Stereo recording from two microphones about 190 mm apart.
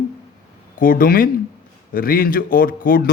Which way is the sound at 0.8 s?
45° left (ahead or behind).